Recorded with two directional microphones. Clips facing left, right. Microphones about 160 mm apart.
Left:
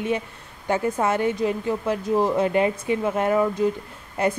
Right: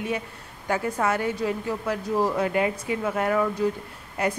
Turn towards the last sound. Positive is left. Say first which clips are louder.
# left 3 dB
turn(degrees=25)  # may be behind; listen again after turning